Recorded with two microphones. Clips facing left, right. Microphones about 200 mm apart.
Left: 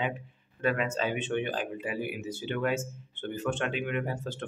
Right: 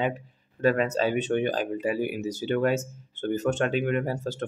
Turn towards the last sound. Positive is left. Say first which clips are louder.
# right 5 dB
turn(degrees=-40)  # may be behind; listen again after turning